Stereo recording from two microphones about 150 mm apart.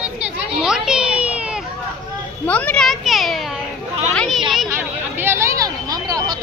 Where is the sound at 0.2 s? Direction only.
5° right (ahead or behind).